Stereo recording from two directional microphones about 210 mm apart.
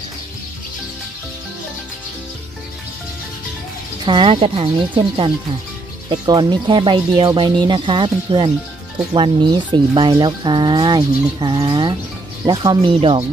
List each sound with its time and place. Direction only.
4.0 s speech: 25° right (ahead or behind)